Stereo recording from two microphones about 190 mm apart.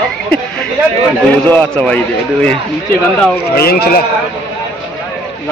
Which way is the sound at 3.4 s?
55° left (ahead or behind).